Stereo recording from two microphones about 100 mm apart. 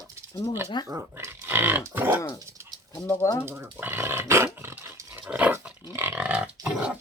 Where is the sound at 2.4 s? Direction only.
35° right (ahead or behind).